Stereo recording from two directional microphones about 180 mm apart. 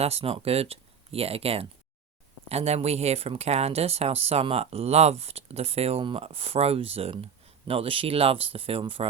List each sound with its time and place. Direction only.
0.0 s speech: 35° right (ahead or behind)